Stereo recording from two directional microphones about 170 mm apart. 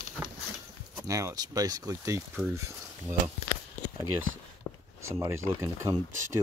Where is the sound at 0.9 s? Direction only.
20° right (ahead or behind).